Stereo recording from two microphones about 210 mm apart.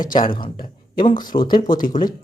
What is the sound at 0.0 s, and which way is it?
Speech, 40° left (ahead or behind).